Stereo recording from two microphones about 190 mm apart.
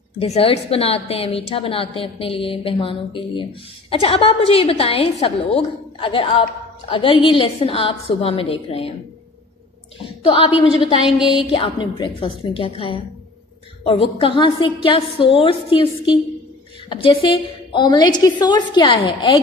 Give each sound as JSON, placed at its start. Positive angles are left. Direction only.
{"t": 0.2, "sound": "a woman's voice", "side_deg": 30}
{"t": 10.2, "sound": "a woman's voice", "side_deg": 30}
{"t": 11.1, "sound": "speech", "side_deg": -5}
{"t": 11.5, "sound": "a woman's voice", "side_deg": 25}
{"t": 16.9, "sound": "a woman's voice", "side_deg": 25}